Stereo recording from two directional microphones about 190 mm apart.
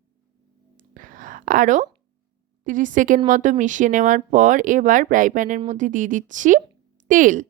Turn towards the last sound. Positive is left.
turn(degrees=-45)  # may be behind; listen again after turning